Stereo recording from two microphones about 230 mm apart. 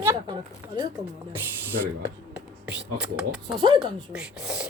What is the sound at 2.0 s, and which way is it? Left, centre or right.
Speech, centre.